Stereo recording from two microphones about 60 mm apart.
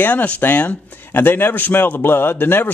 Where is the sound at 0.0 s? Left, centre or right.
Left.